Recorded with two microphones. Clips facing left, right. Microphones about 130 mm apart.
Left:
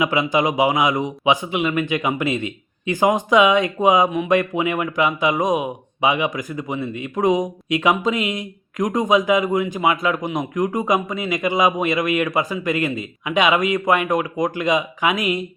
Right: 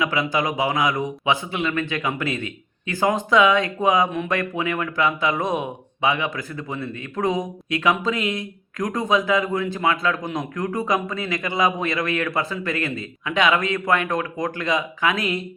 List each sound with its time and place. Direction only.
0.0 s speech: 20° left (ahead or behind)